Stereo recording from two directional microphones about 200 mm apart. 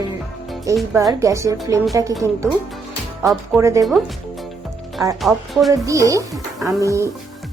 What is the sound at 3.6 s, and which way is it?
Speech, 15° right (ahead or behind).